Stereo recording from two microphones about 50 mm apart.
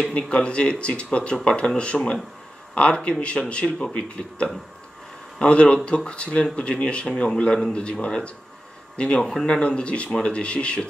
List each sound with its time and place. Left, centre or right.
0.1 s speech: left
9.2 s speech: centre
9.6 s speech: left